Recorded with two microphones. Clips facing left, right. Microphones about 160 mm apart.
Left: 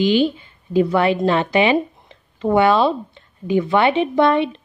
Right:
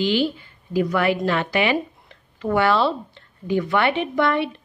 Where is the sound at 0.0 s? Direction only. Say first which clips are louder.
Left 5 dB; 20° left (ahead or behind).